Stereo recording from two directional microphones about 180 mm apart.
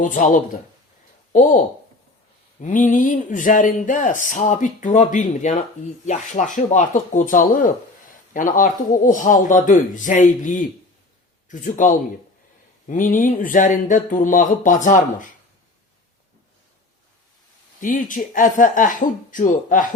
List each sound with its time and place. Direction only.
0.0 s speech: 45° left (ahead or behind)
17.7 s speech: 45° left (ahead or behind)